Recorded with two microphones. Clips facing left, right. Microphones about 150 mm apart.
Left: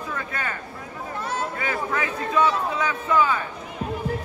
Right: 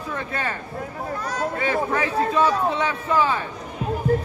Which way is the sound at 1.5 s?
30° right (ahead or behind).